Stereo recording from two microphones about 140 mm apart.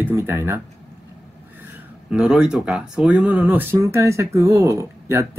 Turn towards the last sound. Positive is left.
turn(degrees=-20)  # may be behind; listen again after turning